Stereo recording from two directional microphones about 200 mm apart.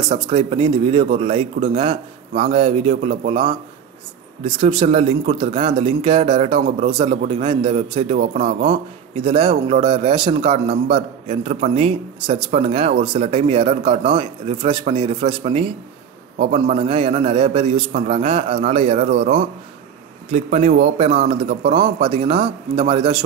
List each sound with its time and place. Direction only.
0.1 s a man's voice: 30° right (ahead or behind)
19.0 s a man's voice: 45° right (ahead or behind)
20.2 s a man's voice: 35° right (ahead or behind)